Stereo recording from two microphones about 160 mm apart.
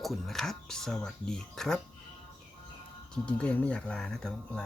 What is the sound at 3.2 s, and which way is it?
Speech, 10° left (ahead or behind).